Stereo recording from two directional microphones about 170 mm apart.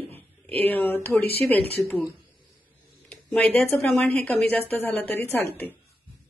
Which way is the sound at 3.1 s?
10° left (ahead or behind).